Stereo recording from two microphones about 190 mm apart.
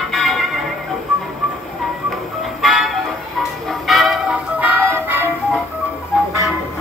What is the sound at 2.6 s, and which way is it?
Music, centre (ahead or behind).